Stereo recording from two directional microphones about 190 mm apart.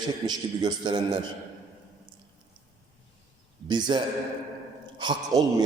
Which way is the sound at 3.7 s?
25° right (ahead or behind).